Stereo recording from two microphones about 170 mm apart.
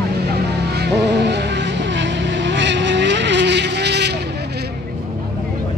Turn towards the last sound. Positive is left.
turn(degrees=-80)